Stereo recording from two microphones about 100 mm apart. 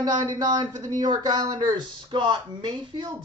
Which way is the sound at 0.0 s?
45° right (ahead or behind).